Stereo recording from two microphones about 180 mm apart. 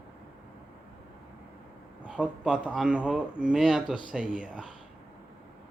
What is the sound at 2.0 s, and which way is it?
Speech, 5° right (ahead or behind).